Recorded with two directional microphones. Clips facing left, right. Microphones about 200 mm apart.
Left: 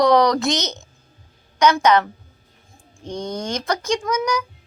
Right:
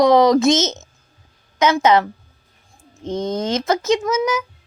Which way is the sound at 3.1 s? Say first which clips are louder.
Right 5 dB; 25° right (ahead or behind).